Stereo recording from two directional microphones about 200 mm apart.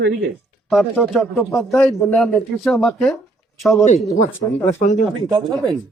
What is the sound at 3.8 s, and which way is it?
Speech, 35° left (ahead or behind).